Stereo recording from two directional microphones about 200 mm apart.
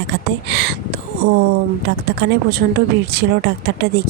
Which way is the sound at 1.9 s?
55° right (ahead or behind).